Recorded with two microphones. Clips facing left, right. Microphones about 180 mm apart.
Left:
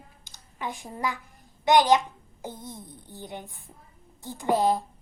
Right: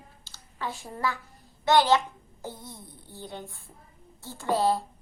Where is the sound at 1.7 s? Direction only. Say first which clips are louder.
Left 2 dB; 15° left (ahead or behind).